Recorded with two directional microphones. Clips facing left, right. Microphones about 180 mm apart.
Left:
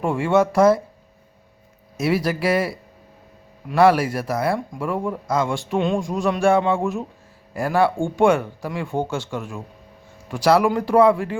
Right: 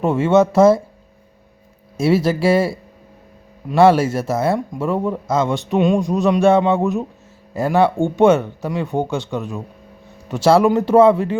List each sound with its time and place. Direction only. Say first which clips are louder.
0.0 s speech: right 4 dB; 20° right (ahead or behind)
2.0 s speech: right 5 dB; 25° right (ahead or behind)